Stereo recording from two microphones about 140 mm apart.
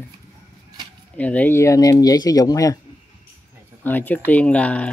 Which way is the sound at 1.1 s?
10° left (ahead or behind).